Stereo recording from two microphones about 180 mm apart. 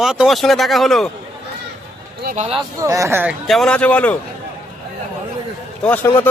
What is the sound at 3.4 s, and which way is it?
Speech, centre (ahead or behind).